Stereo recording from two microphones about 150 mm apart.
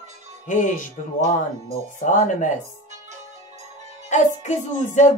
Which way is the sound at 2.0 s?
60° left (ahead or behind).